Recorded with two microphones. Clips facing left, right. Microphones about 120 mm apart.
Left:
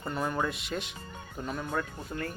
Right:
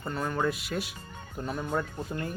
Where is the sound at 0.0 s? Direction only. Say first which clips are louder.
Right 1 dB; 5° left (ahead or behind).